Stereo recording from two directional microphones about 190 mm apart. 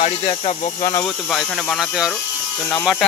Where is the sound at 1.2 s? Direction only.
Centre (ahead or behind).